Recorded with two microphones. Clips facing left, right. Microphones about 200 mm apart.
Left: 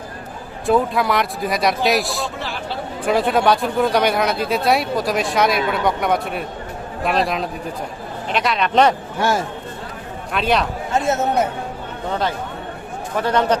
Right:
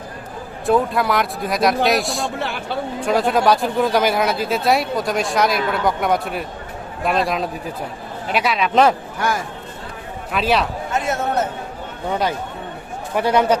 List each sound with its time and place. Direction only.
0.7 s a man's voice: centre (ahead or behind)
9.1 s speech: 25° left (ahead or behind)
10.3 s a man's voice: centre (ahead or behind)
10.9 s speech: 25° left (ahead or behind)
13.1 s a man's voice: 10° right (ahead or behind)